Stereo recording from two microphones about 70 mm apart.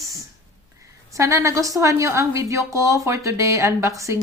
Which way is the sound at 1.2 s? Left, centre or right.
Right.